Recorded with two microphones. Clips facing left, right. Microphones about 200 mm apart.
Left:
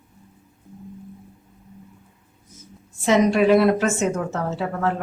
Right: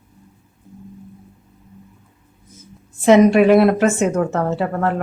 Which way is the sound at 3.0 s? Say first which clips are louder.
Right 6 dB; 60° right (ahead or behind).